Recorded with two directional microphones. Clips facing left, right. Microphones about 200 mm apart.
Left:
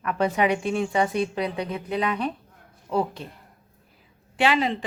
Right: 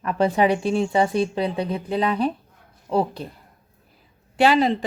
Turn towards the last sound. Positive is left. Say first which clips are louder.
# right 5 dB
turn(degrees=-40)  # may be behind; listen again after turning